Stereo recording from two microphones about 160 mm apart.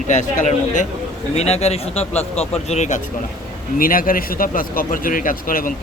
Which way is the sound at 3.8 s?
60° left (ahead or behind).